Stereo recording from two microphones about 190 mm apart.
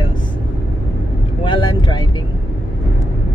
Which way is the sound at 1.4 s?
25° left (ahead or behind).